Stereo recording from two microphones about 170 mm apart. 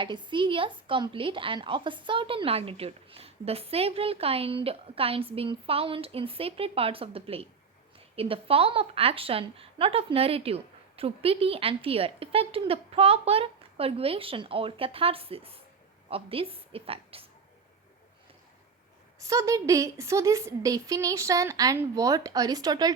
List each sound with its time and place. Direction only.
0.0 s a woman's voice: 25° right (ahead or behind)
19.2 s a woman's voice: 20° right (ahead or behind)